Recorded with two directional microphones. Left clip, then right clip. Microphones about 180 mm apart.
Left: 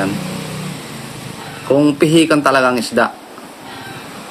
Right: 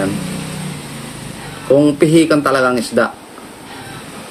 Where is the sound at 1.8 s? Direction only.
15° left (ahead or behind).